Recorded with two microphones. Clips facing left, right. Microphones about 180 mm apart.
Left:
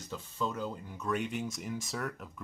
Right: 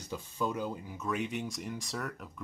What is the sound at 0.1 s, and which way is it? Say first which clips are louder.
Speech: right 2 dB; 10° right (ahead or behind).